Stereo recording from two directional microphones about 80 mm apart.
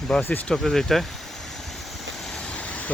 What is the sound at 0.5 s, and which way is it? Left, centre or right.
Speech, centre.